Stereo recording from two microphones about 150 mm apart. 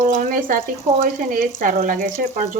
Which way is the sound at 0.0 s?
65° right (ahead or behind).